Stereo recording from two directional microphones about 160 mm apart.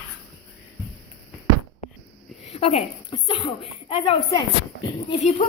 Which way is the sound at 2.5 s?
40° left (ahead or behind).